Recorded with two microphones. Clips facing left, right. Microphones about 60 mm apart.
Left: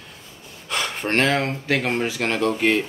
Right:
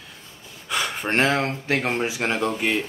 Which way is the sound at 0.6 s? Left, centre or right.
Centre.